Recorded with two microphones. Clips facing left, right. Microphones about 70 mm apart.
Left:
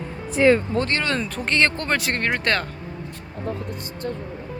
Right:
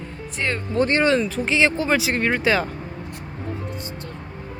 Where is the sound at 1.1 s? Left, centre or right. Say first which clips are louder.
Right 5 dB; centre.